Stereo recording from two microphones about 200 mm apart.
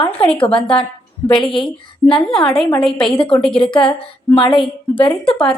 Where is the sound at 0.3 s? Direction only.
25° left (ahead or behind).